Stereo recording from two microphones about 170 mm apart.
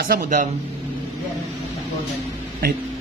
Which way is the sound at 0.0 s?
60° right (ahead or behind).